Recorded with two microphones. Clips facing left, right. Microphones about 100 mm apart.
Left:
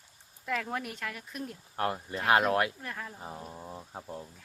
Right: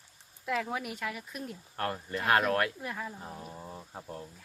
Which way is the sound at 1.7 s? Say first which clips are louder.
Left 2 dB; 20° left (ahead or behind).